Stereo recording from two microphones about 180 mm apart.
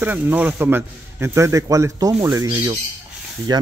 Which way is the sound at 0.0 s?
10° right (ahead or behind).